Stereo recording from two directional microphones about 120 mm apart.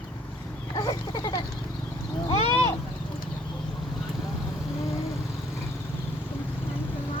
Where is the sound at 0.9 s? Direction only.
40° left (ahead or behind).